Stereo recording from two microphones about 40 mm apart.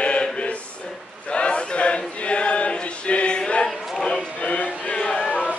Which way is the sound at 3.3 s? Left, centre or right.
Left.